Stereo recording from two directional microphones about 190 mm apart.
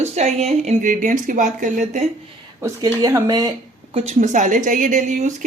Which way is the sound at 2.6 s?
15° right (ahead or behind).